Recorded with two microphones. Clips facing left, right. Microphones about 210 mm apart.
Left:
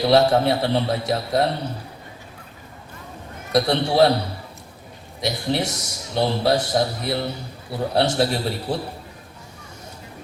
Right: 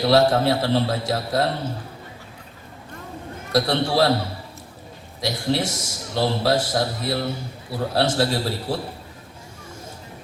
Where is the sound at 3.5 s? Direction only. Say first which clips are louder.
Left 2 dB; 20° left (ahead or behind).